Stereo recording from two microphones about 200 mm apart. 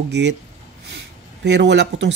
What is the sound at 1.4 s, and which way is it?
Speech, 60° right (ahead or behind).